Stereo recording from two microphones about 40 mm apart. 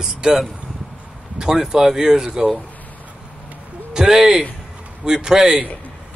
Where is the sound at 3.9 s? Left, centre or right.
Centre.